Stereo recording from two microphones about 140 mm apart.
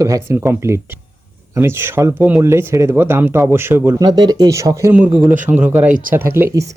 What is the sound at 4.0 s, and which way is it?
Speech, 30° right (ahead or behind).